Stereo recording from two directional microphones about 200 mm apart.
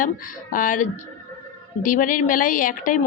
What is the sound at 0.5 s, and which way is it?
A woman's voice, 40° left (ahead or behind).